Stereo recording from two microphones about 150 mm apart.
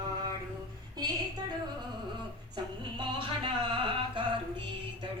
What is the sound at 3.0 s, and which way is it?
Music, 35° right (ahead or behind).